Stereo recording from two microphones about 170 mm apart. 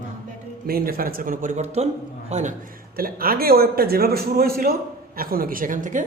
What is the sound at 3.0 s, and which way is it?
A man's voice, 60° right (ahead or behind).